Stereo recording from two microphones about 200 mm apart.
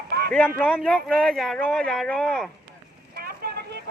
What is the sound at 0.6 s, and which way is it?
Speech, 5° left (ahead or behind).